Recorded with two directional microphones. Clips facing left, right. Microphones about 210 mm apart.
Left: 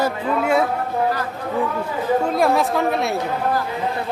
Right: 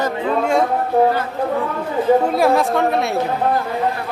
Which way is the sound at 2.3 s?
Centre (ahead or behind).